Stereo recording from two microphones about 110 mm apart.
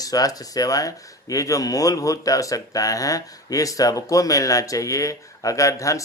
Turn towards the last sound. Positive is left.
turn(degrees=30)  # may be behind; listen again after turning